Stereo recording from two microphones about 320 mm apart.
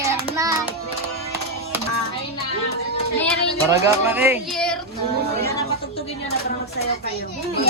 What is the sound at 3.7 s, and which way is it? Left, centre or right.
Speech, centre.